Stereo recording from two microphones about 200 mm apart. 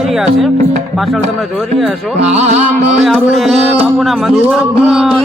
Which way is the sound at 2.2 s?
35° right (ahead or behind).